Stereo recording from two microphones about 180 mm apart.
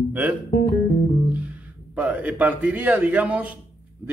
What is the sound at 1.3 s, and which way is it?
Speech, 10° right (ahead or behind).